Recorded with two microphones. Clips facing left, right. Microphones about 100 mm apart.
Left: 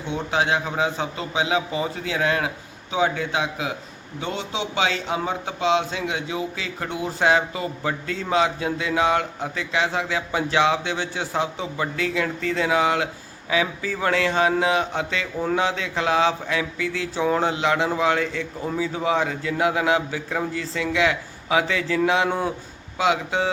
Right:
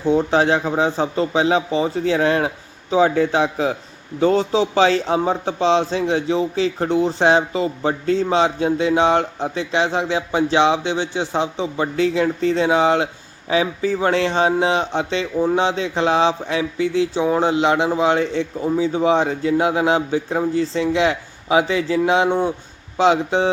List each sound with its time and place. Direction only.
0.0 s a man's voice: 35° right (ahead or behind)